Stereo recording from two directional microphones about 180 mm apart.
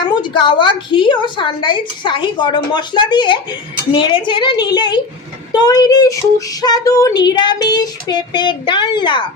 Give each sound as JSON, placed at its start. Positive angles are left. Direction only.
{"t": 0.0, "sound": "a woman's voice", "side_deg": 25}